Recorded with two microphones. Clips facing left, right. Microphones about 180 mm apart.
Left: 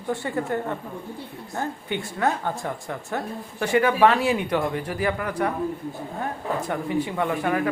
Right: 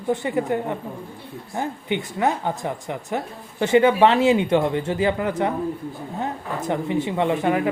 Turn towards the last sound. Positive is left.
turn(degrees=-20)  # may be behind; listen again after turning